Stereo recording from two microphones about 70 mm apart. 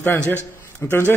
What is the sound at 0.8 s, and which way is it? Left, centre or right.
Speech, left.